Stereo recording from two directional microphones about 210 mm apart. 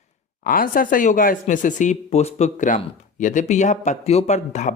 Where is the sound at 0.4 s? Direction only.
40° left (ahead or behind).